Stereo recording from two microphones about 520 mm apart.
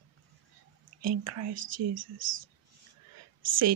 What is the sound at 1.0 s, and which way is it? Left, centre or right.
Speech, right.